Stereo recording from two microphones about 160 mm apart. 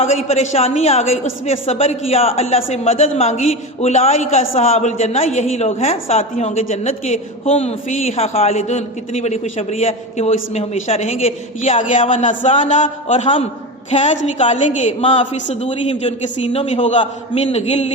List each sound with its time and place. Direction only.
0.3 s a man's voice: 40° left (ahead or behind)
12.5 s a man's voice: 35° left (ahead or behind)
12.7 s a man's voice: 50° left (ahead or behind)
15.7 s a man's voice: 35° left (ahead or behind)